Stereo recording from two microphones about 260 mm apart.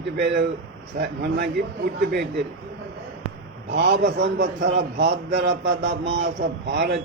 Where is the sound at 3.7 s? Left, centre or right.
Right.